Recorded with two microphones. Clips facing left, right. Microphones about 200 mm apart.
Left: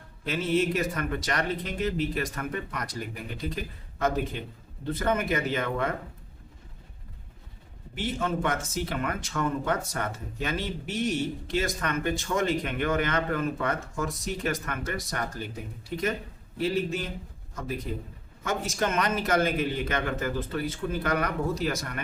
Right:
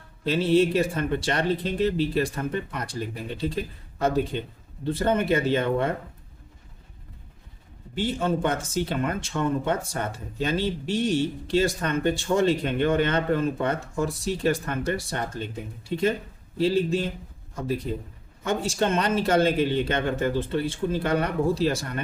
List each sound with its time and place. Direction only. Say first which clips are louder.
0.3 s speech: right 5 dB; 30° right (ahead or behind)
7.9 s speech: right 4 dB; 30° right (ahead or behind)